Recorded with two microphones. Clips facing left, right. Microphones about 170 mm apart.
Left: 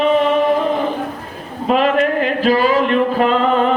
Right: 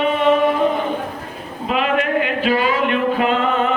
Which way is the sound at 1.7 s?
40° left (ahead or behind).